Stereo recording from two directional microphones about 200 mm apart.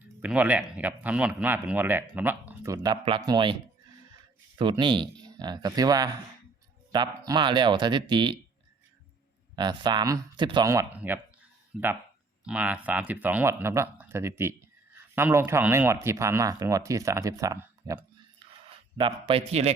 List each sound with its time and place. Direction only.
0.2 s speech: 5° right (ahead or behind); by 8.4 s 25° right (ahead or behind)
9.6 s speech: 20° right (ahead or behind)
18.9 s speech: 25° right (ahead or behind)